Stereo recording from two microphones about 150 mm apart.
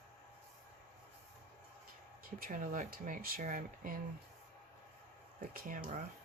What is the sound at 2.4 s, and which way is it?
Speech, 65° right (ahead or behind).